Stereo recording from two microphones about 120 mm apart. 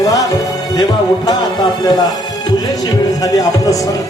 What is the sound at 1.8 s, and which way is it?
Music, 30° left (ahead or behind).